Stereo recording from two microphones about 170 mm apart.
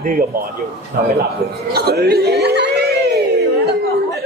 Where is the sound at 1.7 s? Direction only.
65° right (ahead or behind).